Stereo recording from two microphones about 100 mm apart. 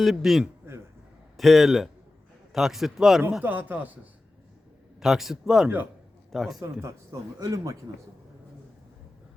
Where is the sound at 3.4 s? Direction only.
15° right (ahead or behind).